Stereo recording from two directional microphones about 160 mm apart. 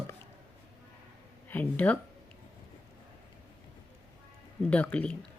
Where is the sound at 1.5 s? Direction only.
10° left (ahead or behind).